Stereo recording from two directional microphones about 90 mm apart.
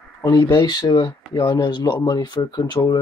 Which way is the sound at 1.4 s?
55° left (ahead or behind).